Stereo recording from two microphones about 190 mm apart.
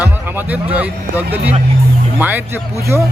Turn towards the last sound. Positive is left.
turn(degrees=-15)  # may be behind; listen again after turning